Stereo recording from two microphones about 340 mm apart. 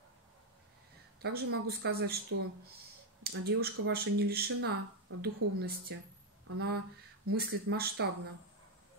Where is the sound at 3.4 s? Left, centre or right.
Right.